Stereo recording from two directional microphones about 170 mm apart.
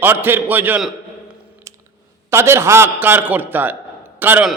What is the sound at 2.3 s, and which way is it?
A man's voice, 15° right (ahead or behind).